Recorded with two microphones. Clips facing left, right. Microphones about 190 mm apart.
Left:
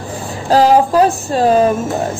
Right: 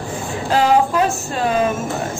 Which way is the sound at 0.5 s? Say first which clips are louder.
Left 5 dB; 35° left (ahead or behind).